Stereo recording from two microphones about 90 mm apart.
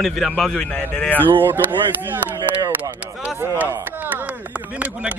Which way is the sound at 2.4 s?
50° right (ahead or behind).